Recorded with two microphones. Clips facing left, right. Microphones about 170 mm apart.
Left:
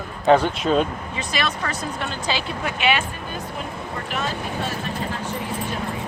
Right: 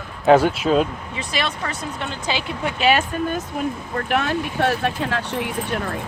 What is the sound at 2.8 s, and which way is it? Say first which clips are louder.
Speech: right 5 dB; 40° right (ahead or behind).